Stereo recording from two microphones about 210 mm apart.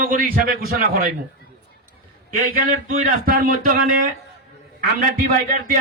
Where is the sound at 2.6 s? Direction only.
45° right (ahead or behind).